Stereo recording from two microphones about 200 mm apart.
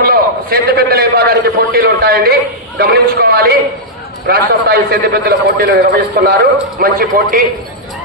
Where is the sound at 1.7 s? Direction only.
50° right (ahead or behind).